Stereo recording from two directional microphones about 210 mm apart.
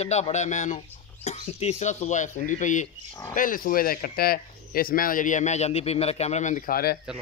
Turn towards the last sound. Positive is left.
turn(degrees=45)  # may be behind; listen again after turning